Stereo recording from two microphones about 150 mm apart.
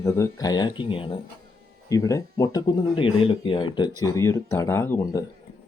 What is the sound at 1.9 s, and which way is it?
Speech, 20° left (ahead or behind).